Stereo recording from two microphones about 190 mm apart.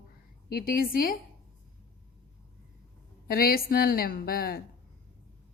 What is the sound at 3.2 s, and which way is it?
A woman's voice, 50° left (ahead or behind).